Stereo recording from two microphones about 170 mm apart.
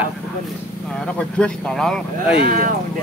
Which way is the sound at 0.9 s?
5° left (ahead or behind).